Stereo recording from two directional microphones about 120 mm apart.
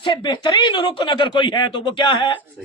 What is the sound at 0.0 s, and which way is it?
A man's voice, 40° left (ahead or behind).